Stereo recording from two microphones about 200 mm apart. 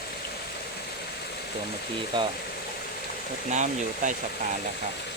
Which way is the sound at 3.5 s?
35° right (ahead or behind).